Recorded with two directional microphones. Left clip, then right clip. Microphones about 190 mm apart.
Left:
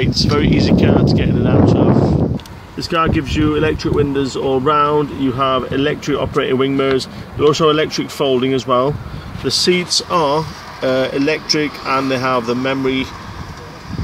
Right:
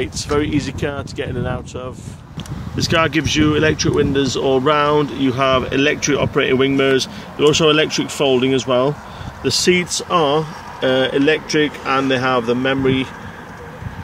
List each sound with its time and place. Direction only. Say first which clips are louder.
0.0 s speech: left 3 dB; 5° right (ahead or behind)
2.9 s speech: even; 15° right (ahead or behind)